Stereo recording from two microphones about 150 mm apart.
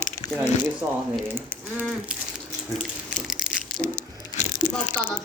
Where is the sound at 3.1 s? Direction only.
5° right (ahead or behind).